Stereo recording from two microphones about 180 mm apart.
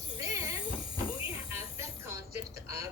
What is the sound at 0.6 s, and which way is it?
Train, 30° left (ahead or behind).